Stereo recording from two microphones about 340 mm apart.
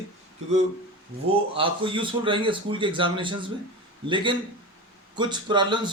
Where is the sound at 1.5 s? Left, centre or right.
Centre.